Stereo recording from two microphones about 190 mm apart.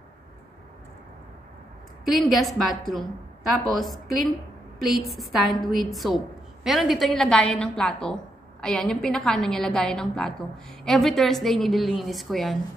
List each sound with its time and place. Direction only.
2.0 s a woman's voice: centre (ahead or behind)